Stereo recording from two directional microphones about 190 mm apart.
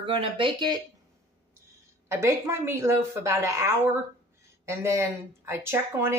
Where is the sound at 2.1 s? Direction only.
15° right (ahead or behind).